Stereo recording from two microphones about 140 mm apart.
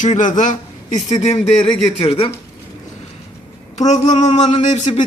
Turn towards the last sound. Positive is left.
turn(degrees=60)  # may be behind; listen again after turning